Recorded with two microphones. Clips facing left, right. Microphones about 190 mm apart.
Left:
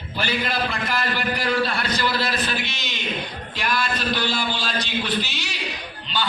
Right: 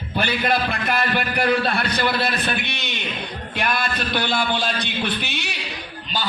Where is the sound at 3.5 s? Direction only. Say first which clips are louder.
Right 1 dB; 60° right (ahead or behind).